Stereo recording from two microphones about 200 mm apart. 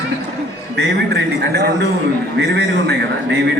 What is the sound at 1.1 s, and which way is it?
A man's voice, 55° right (ahead or behind).